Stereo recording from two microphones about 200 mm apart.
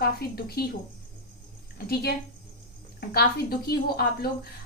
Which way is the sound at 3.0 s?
50° left (ahead or behind).